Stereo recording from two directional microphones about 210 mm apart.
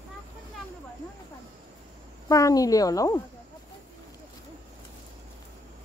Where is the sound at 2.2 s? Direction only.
15° left (ahead or behind).